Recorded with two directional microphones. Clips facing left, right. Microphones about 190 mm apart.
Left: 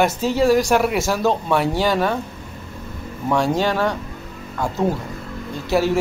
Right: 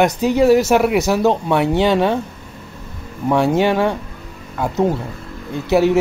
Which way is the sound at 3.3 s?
20° right (ahead or behind).